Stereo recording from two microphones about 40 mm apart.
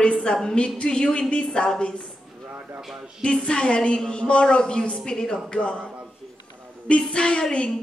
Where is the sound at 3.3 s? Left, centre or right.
Left.